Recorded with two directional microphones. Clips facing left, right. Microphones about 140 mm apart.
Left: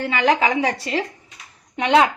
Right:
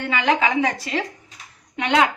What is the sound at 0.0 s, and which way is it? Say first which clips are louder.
Speech: left 2 dB; 35° left (ahead or behind).